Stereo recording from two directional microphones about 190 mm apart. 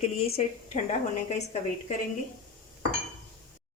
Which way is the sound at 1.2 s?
35° left (ahead or behind).